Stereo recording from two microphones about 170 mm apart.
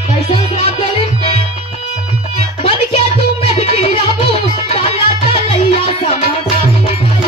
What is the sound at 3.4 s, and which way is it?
Music, 35° left (ahead or behind).